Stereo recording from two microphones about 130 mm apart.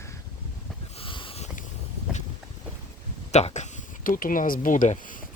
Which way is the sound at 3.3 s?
60° left (ahead or behind).